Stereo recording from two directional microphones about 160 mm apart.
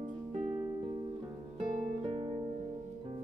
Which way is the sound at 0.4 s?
35° right (ahead or behind).